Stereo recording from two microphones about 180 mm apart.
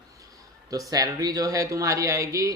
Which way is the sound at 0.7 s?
20° right (ahead or behind).